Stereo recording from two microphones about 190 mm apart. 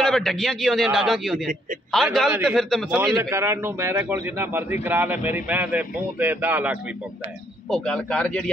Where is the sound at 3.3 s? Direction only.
15° right (ahead or behind).